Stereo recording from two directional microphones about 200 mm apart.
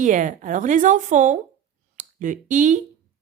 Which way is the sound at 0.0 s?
40° right (ahead or behind).